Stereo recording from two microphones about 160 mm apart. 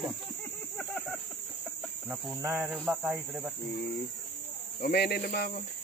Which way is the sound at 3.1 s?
10° right (ahead or behind).